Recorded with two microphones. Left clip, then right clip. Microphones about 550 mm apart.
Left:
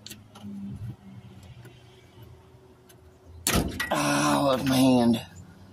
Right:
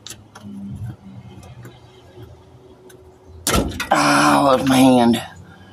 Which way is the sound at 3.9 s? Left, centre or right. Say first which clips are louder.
Right 11 dB; left.